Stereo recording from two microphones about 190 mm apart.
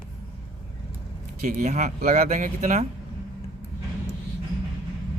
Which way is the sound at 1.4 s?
40° right (ahead or behind).